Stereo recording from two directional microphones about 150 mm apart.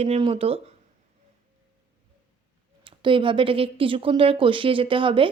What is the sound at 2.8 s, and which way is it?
A woman's voice, 35° right (ahead or behind).